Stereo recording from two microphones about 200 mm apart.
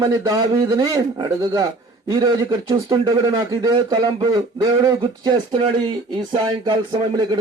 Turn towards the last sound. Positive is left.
turn(degrees=-20)  # may be behind; listen again after turning